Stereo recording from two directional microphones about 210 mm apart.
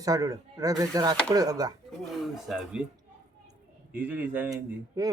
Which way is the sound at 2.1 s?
Centre (ahead or behind).